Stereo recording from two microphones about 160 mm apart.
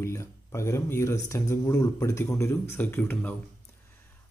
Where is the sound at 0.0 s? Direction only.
20° left (ahead or behind).